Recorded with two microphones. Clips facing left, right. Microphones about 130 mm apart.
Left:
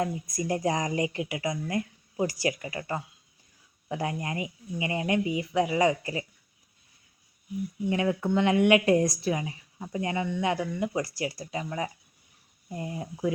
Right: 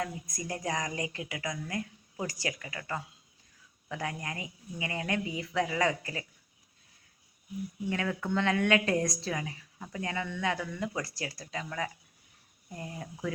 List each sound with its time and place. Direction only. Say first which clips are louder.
0.3 s speech: left 7 dB; 25° left (ahead or behind)
7.9 s speech: left 6 dB; 20° left (ahead or behind)